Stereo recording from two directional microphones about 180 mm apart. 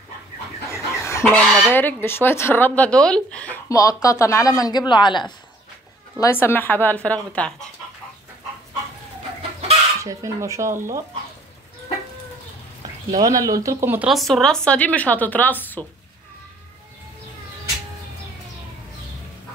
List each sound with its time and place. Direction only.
0.7 s chicken: 15° left (ahead or behind)
1.2 s speech: centre (ahead or behind); by 5.3 s 25° left (ahead or behind)
6.1 s speech: 15° left (ahead or behind)
10.0 s speech: 15° right (ahead or behind)
13.1 s speech: 20° right (ahead or behind); by 15.8 s 10° left (ahead or behind)